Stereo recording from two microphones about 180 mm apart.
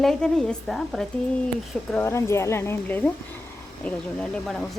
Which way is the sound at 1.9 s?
10° left (ahead or behind).